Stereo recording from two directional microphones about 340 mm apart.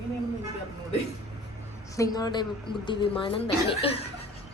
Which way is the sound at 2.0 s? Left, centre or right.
Centre.